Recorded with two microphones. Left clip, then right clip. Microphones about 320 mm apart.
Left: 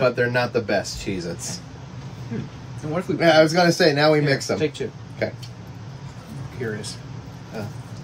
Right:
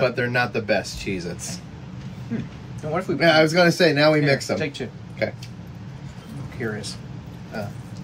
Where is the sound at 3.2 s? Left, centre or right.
Centre.